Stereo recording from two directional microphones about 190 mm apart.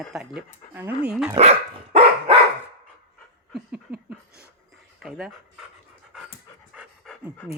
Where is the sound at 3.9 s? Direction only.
55° right (ahead or behind).